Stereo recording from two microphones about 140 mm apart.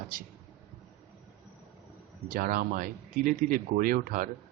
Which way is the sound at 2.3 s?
90° right.